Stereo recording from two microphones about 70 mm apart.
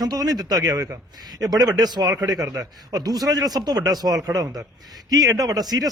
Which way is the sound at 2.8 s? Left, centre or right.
Right.